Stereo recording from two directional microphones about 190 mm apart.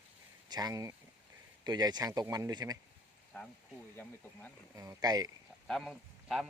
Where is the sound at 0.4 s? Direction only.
20° right (ahead or behind).